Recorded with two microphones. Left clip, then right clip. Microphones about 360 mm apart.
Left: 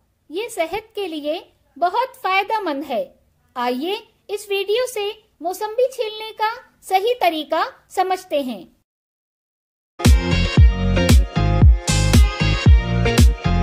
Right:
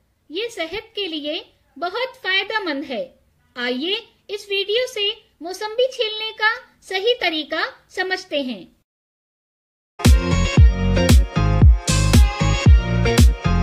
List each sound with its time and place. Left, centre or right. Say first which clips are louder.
0.3 s a woman's voice: left 3 dB; centre
10.0 s music: even; centre